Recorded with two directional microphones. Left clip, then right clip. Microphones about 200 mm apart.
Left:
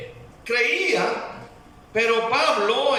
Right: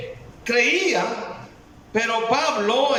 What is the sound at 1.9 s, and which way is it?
A man's voice, 35° right (ahead or behind).